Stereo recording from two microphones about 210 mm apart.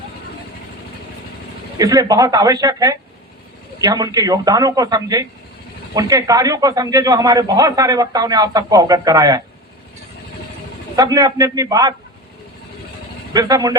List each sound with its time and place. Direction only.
1.8 s a man's voice: 15° right (ahead or behind)
10.9 s a man's voice: 15° right (ahead or behind)
13.3 s a man's voice: 15° right (ahead or behind)